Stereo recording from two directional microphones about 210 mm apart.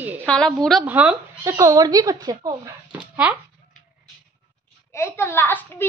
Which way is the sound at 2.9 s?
5° right (ahead or behind).